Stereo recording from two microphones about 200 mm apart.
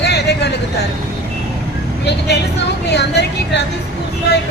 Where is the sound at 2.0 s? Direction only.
55° left (ahead or behind).